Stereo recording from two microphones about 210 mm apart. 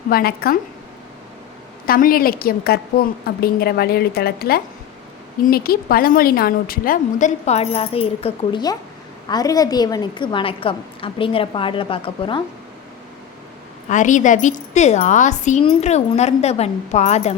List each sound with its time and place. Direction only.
0.1 s a woman's voice: 45° left (ahead or behind)
1.9 s a woman's voice: 45° left (ahead or behind); by 12.4 s 25° left (ahead or behind)
13.8 s a woman's voice: 35° left (ahead or behind)